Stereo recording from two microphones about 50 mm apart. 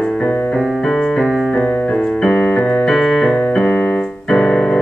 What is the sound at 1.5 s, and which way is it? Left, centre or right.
Keyboard, centre.